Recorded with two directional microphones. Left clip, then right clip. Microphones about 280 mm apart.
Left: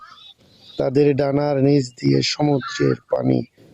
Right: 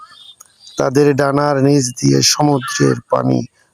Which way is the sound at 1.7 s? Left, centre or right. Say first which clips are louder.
Right 4 dB; right.